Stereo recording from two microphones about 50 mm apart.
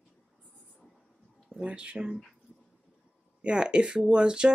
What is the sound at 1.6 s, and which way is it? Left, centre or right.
Speech, right.